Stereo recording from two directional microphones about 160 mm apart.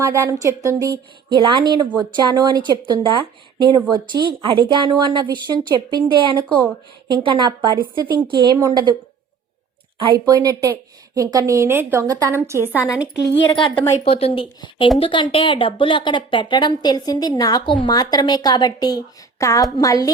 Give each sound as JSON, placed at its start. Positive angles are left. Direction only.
{"t": 0.0, "sound": "speech", "side_deg": -20}
{"t": 1.3, "sound": "speech", "side_deg": -30}
{"t": 10.0, "sound": "a woman's voice", "side_deg": -25}
{"t": 12.6, "sound": "a woman's voice", "side_deg": 15}
{"t": 14.0, "sound": "speech", "side_deg": 35}